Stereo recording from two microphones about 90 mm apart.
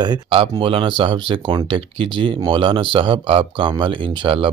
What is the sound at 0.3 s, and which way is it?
Speech, 85° right.